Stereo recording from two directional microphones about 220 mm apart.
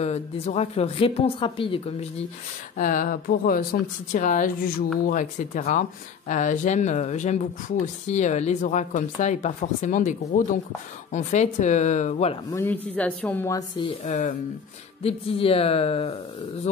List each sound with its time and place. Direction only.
0.0 s a woman's voice: 30° left (ahead or behind)
2.8 s speech: 35° left (ahead or behind)
12.4 s a woman's voice: 10° left (ahead or behind); by 16.2 s 25° left (ahead or behind)